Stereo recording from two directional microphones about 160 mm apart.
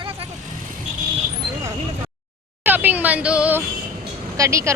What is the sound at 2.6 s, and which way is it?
Speech, 10° right (ahead or behind).